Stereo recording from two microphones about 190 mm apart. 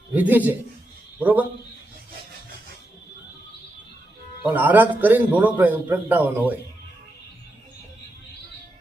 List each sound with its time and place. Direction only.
0.1 s a man's voice: 10° right (ahead or behind)
4.4 s a man's voice: 10° right (ahead or behind)